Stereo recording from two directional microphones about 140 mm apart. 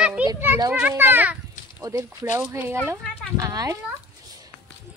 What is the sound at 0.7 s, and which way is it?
Speech, 15° right (ahead or behind).